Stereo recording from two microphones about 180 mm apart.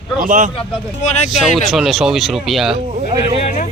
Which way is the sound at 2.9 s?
35° right (ahead or behind).